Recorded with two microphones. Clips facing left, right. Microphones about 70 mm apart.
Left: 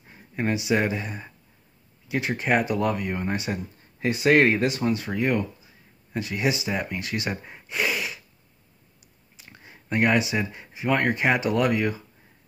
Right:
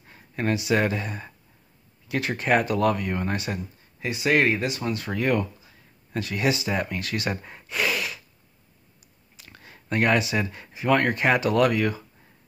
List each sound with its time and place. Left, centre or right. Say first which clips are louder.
0.1 s speech: even; centre
4.0 s speech: left 3 dB; left
4.9 s speech: even; centre
9.4 s speech: even; centre